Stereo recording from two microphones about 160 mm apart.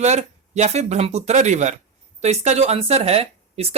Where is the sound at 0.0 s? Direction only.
45° right (ahead or behind).